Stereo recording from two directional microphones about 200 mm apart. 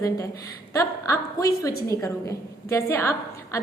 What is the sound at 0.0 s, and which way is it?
A woman's voice, 15° left (ahead or behind).